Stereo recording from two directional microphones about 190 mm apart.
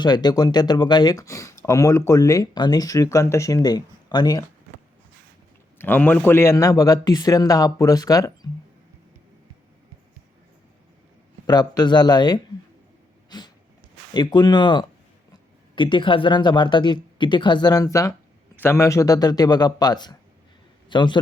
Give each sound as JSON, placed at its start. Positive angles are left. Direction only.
{"t": 0.0, "sound": "speech", "side_deg": 20}
{"t": 5.8, "sound": "speech", "side_deg": 10}
{"t": 11.4, "sound": "speech", "side_deg": 20}
{"t": 13.3, "sound": "a sound", "side_deg": 20}
{"t": 14.1, "sound": "speech", "side_deg": 20}